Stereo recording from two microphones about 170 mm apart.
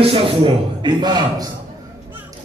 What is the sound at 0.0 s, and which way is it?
A man's voice, 35° right (ahead or behind).